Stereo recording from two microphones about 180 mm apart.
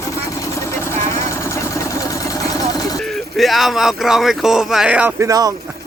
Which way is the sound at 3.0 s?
Centre (ahead or behind).